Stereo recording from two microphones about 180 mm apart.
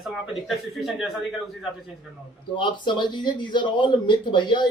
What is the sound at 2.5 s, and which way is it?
Speech, 25° left (ahead or behind).